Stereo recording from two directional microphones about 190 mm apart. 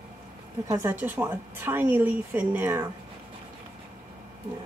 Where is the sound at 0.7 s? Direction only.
10° right (ahead or behind).